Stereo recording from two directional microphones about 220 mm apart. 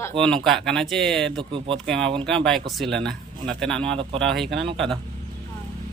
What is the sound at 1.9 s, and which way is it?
Speech, 5° left (ahead or behind).